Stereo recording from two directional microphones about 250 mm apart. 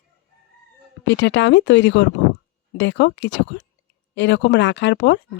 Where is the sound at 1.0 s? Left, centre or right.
Left.